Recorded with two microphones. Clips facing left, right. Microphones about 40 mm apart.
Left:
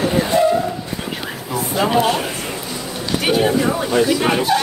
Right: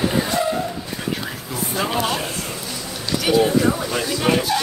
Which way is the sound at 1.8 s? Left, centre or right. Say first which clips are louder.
Left 7 dB; centre.